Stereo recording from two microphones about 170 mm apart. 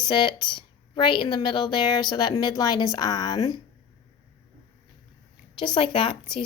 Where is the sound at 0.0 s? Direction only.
25° left (ahead or behind).